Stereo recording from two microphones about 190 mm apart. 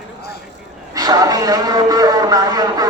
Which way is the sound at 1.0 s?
20° right (ahead or behind).